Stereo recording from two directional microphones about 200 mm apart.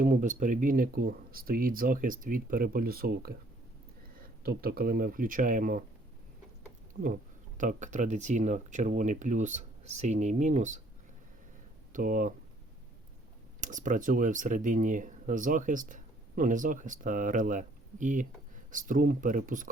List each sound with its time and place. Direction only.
0.0 s speech: 40° right (ahead or behind)
7.6 s speech: 40° right (ahead or behind)
11.9 s speech: 40° right (ahead or behind)
13.6 s speech: 40° right (ahead or behind)